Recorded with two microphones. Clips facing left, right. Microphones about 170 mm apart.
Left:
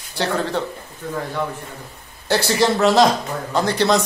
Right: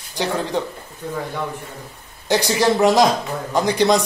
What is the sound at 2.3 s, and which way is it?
A man's voice, 15° right (ahead or behind).